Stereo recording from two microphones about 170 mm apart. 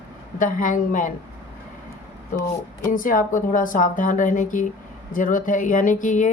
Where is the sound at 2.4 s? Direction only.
55° left (ahead or behind).